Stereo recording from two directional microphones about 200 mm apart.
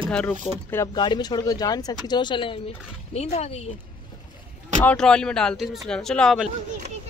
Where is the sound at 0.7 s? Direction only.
20° left (ahead or behind); by 3.6 s 35° left (ahead or behind).